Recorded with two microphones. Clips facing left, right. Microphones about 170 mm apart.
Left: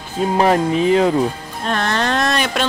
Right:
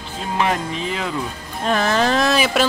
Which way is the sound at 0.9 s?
40° left (ahead or behind).